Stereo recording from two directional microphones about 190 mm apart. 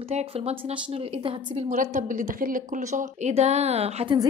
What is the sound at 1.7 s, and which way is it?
A woman's voice, 45° right (ahead or behind).